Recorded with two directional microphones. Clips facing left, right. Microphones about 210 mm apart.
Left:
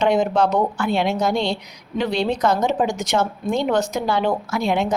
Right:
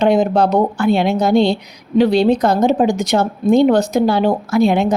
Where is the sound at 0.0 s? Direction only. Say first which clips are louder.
Right 4 dB; 35° right (ahead or behind).